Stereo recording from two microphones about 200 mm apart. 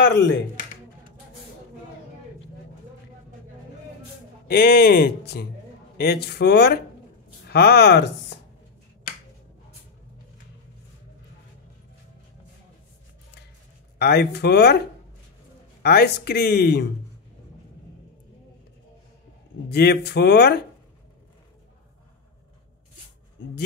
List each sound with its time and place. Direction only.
0.0 s speech: 60° left (ahead or behind)
4.5 s speech: 55° left (ahead or behind)
13.9 s speech: 55° left (ahead or behind)
15.8 s speech: 55° left (ahead or behind)
19.7 s speech: 55° left (ahead or behind)